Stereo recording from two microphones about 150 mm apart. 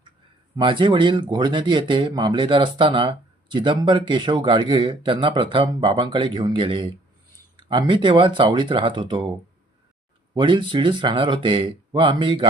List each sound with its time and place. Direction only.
0.5 s speech: 35° right (ahead or behind)
10.3 s speech: 35° right (ahead or behind)